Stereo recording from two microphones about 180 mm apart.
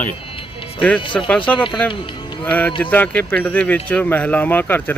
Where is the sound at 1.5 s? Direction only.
25° left (ahead or behind).